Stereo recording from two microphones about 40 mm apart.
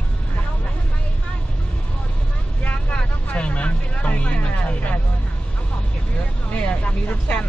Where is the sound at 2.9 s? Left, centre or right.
Left.